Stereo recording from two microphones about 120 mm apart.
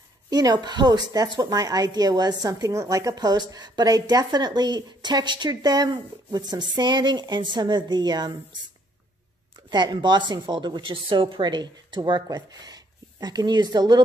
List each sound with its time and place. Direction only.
0.3 s a woman's voice: 30° right (ahead or behind)
9.7 s a woman's voice: 35° right (ahead or behind)